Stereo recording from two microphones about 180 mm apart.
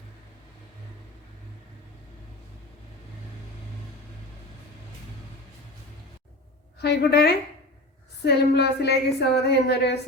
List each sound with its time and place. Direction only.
6.8 s a woman's voice: 60° left (ahead or behind)